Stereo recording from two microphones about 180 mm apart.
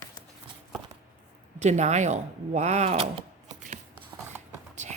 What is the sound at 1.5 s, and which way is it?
A woman's voice, 40° right (ahead or behind).